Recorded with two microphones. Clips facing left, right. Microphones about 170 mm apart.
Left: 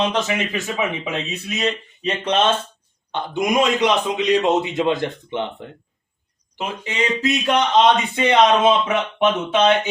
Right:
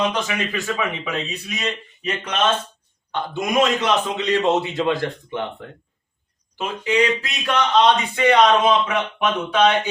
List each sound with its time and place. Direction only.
0.1 s a man's voice: 20° left (ahead or behind)
6.6 s speech: 20° left (ahead or behind)